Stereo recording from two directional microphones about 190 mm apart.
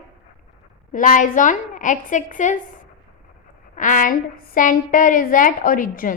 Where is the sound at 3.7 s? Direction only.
45° left (ahead or behind).